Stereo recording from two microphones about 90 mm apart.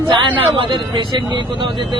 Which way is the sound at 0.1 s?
65° right (ahead or behind).